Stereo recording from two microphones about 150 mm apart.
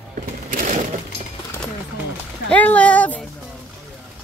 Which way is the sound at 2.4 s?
10° left (ahead or behind).